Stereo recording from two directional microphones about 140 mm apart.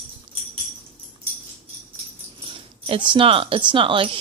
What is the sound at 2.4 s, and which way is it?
Speech, 40° right (ahead or behind).